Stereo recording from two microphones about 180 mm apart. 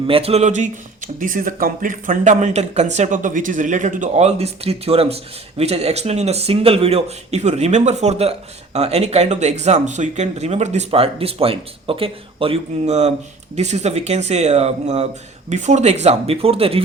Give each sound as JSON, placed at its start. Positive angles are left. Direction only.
{"t": 0.1, "sound": "speech", "side_deg": -35}